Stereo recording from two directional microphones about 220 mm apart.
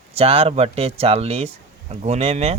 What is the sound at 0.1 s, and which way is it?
Speech, 25° right (ahead or behind).